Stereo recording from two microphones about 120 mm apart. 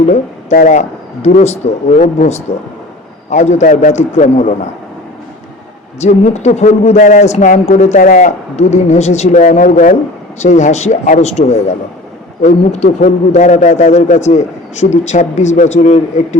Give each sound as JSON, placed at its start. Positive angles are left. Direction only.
{"t": 0.6, "sound": "speech", "side_deg": 90}
{"t": 6.0, "sound": "a man's voice", "side_deg": 70}